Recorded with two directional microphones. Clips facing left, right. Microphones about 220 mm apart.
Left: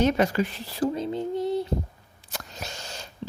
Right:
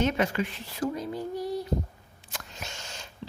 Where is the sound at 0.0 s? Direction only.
40° left (ahead or behind).